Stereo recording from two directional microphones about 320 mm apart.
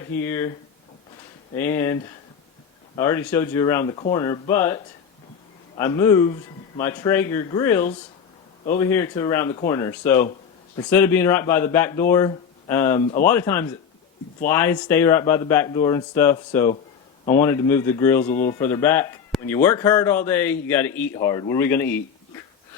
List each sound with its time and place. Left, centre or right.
0.1 s speech: centre
1.5 s speech: centre